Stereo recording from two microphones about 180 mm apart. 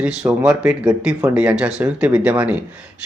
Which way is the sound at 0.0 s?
5° right (ahead or behind).